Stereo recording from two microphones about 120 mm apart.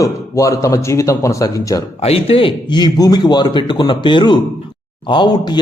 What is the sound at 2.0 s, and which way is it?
Speech, 55° left (ahead or behind).